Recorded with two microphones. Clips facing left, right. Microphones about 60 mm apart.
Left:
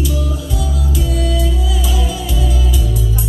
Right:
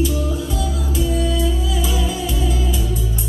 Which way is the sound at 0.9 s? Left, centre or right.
Right.